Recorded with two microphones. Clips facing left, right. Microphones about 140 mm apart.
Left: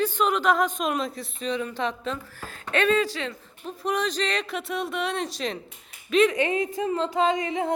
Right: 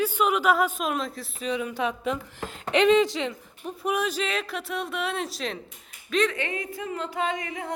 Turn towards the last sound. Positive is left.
turn(degrees=25)  # may be behind; listen again after turning